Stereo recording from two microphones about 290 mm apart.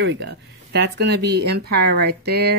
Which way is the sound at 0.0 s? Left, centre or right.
Right.